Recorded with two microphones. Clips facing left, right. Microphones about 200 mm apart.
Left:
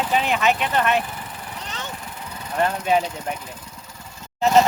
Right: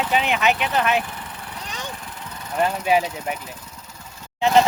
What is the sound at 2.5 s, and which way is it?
Speech, centre (ahead or behind).